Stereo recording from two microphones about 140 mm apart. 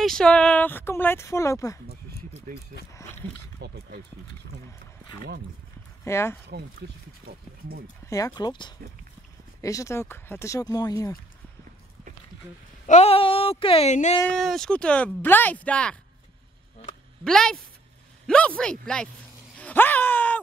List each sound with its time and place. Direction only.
0.0 s speech: 5° left (ahead or behind); by 1.8 s 20° left (ahead or behind)
2.5 s speech: 65° right (ahead or behind)
2.9 s a sound: 20° left (ahead or behind)
6.0 s speech: 20° left (ahead or behind)
8.1 s speech: 25° left (ahead or behind)
12.8 s speech: 55° left (ahead or behind)
14.3 s speech: centre (ahead or behind)
17.2 s speech: 5° left (ahead or behind)
19.6 s a sound: 15° left (ahead or behind)